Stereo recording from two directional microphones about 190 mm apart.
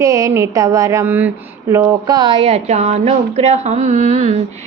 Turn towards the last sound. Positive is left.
turn(degrees=-35)  # may be behind; listen again after turning